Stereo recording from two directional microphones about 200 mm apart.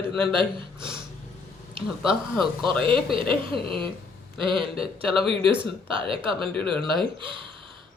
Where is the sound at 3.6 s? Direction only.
25° right (ahead or behind).